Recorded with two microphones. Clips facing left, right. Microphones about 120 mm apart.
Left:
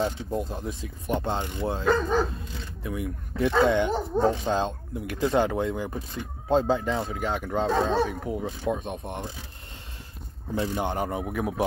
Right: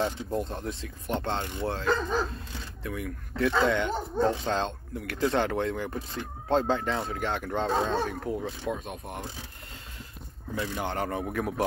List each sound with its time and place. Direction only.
0.0 s speech: centre (ahead or behind); by 3.9 s 20° left (ahead or behind)
4.1 s speech: 90° left
4.5 s speech: 15° left (ahead or behind)
8.2 s speech: 15° left (ahead or behind)
10.5 s speech: 30° left (ahead or behind)
10.9 s speech: 15° left (ahead or behind)